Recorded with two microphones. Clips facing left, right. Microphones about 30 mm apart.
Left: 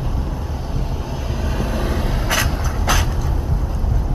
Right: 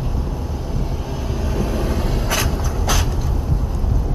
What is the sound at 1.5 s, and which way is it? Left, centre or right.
Vehicle, left.